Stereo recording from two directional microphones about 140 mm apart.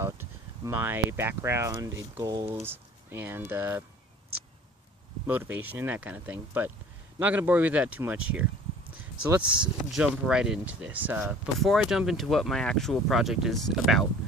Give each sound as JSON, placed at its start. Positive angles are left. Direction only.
{"t": 0.0, "sound": "speech", "side_deg": -20}
{"t": 2.6, "sound": "speech", "side_deg": -15}
{"t": 5.2, "sound": "speech", "side_deg": -10}
{"t": 9.6, "sound": "speech", "side_deg": -5}